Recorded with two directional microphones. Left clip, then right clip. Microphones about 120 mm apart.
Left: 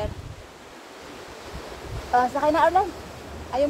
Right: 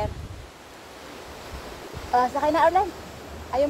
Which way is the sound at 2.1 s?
20° left (ahead or behind).